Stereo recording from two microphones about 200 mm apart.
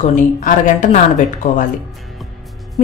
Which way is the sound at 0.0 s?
40° left (ahead or behind).